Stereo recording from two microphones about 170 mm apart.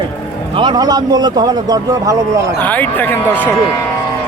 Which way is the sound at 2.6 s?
10° left (ahead or behind).